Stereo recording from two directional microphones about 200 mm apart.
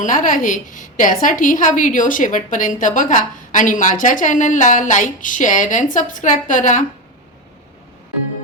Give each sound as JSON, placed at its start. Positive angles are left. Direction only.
{"t": 0.0, "sound": "a woman's voice", "side_deg": 40}